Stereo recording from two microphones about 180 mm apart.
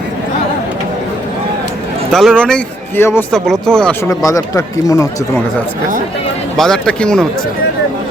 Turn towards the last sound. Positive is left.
turn(degrees=5)  # may be behind; listen again after turning